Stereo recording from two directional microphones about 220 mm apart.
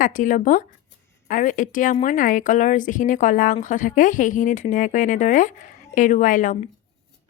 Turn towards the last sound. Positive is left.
turn(degrees=35)  # may be behind; listen again after turning